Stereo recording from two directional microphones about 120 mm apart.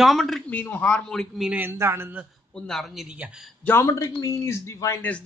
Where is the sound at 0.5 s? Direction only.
15° left (ahead or behind).